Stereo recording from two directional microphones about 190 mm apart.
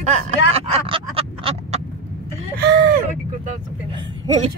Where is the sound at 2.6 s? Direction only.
55° right (ahead or behind).